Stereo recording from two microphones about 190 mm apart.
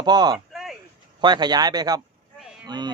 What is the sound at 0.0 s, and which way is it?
Speech, 20° right (ahead or behind).